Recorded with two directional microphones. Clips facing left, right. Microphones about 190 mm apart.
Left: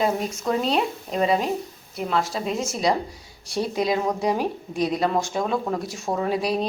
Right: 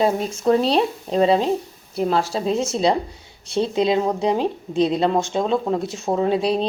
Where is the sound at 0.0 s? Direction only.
30° right (ahead or behind).